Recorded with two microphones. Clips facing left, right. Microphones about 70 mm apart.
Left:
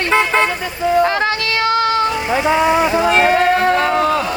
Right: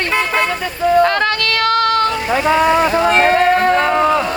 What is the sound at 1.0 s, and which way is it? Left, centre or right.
Child singing, right.